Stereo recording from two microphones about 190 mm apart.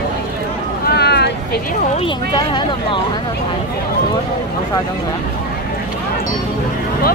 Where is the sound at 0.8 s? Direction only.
60° left (ahead or behind).